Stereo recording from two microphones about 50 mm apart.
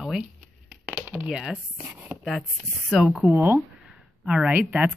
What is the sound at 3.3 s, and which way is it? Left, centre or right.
Speech, right.